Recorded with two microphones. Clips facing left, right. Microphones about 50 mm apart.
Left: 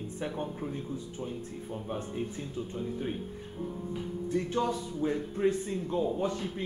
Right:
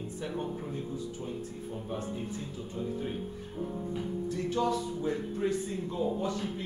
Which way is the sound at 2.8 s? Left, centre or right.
Centre.